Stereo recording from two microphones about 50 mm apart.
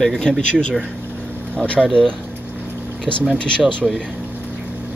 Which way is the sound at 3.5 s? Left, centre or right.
Left.